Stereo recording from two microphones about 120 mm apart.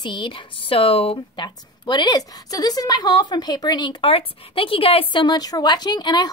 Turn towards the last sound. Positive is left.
turn(degrees=35)  # may be behind; listen again after turning